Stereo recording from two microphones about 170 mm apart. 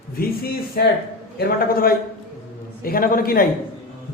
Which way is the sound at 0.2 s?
60° left (ahead or behind).